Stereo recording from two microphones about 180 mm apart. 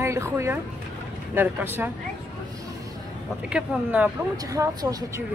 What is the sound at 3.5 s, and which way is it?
Speech, 5° right (ahead or behind).